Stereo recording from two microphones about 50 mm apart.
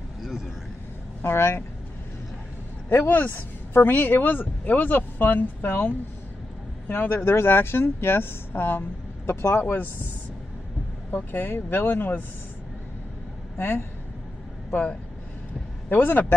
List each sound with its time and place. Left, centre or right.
0.2 s vehicle: centre
1.2 s speech: left
2.9 s speech: left
11.1 s speech: left
13.6 s speech: left
15.9 s speech: left